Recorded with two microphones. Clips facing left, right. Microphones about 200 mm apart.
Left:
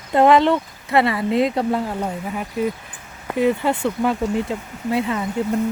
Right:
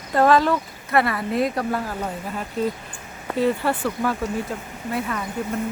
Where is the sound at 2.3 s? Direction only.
10° left (ahead or behind).